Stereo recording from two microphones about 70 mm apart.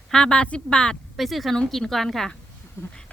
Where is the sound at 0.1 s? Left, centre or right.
Centre.